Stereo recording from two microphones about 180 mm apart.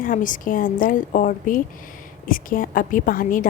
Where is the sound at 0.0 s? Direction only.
50° left (ahead or behind).